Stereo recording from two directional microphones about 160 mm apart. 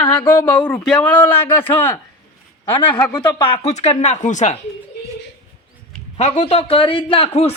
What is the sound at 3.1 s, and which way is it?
Speech, 25° left (ahead or behind).